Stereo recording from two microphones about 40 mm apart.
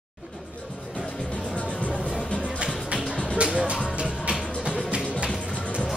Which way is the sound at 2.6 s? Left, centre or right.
Right.